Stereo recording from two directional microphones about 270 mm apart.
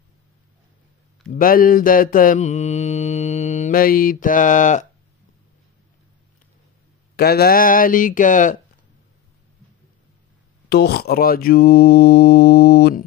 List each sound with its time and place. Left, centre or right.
1.3 s mantra: left
7.2 s mantra: left
10.7 s mantra: left